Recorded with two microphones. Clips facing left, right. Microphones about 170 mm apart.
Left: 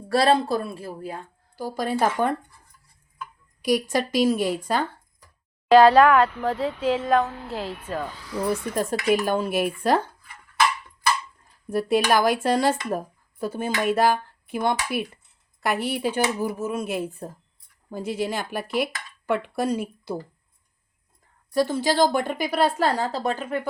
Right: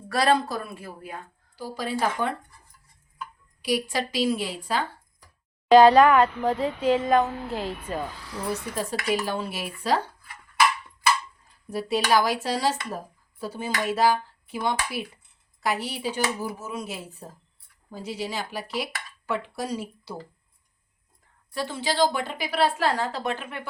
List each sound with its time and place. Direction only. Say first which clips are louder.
0.1 s speech: left 3 dB; 30° left (ahead or behind)
1.5 s a woman's voice: left 4 dB; 45° left (ahead or behind)
3.6 s a woman's voice: left 4 dB; 45° left (ahead or behind)
5.7 s speech: even; 5° left (ahead or behind)
8.7 s a woman's voice: left 5 dB; 50° left (ahead or behind)
11.7 s a woman's voice: left 3 dB; 50° left (ahead or behind)
21.5 s a woman's voice: left 7 dB; 40° left (ahead or behind)